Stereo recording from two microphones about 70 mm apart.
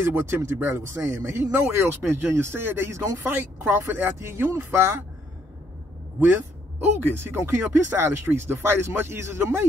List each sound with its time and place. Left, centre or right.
0.0 s speech: right
3.3 s speech: right
7.0 s speech: right